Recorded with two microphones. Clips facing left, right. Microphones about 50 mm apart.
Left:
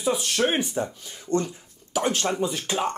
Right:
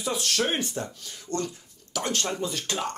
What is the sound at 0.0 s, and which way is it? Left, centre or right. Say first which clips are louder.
Speech: left 4 dB; centre.